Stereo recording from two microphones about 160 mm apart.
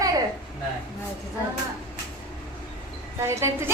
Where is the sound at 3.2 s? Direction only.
15° right (ahead or behind).